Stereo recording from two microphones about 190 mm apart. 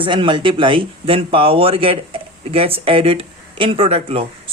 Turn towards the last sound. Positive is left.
turn(degrees=-30)  # may be behind; listen again after turning